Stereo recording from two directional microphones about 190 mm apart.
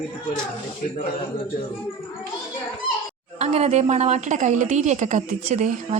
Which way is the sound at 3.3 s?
35° right (ahead or behind).